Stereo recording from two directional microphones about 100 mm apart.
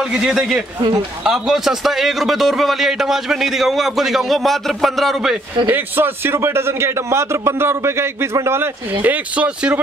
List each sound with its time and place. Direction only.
0.1 s a man's voice: 5° right (ahead or behind)
5.7 s a man's voice: 20° right (ahead or behind)
9.0 s speech: 15° right (ahead or behind)